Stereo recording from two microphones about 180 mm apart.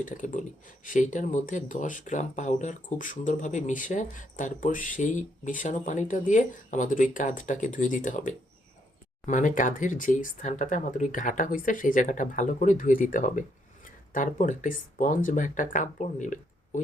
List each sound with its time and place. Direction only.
0.0 s speech: 45° left (ahead or behind)